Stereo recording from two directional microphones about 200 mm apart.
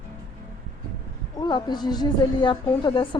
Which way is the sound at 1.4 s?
20° left (ahead or behind).